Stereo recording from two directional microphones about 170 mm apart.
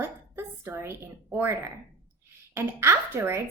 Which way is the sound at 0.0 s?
15° right (ahead or behind).